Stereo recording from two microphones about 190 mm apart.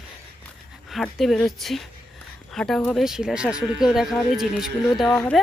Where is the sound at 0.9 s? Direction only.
Centre (ahead or behind).